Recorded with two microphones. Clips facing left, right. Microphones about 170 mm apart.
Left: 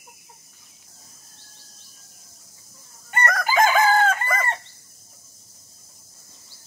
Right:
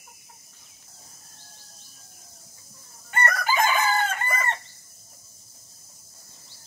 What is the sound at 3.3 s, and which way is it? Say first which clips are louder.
Chicken: left 6 dB; 90° left.